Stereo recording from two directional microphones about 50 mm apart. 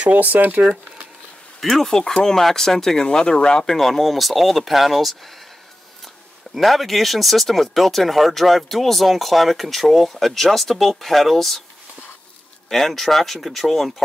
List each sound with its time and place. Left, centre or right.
0.0 s speech: right
1.6 s speech: centre
3.7 s speech: centre
6.5 s speech: centre
12.6 s speech: centre